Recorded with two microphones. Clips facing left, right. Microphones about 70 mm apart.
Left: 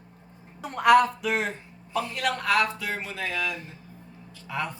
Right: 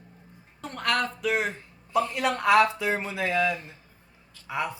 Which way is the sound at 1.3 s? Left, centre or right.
Centre.